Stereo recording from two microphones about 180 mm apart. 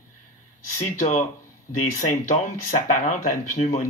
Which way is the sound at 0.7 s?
40° left (ahead or behind).